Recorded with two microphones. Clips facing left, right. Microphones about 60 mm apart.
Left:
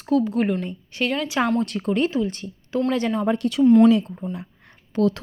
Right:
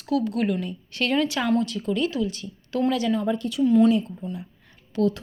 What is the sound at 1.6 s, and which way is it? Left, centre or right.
A woman's voice, left.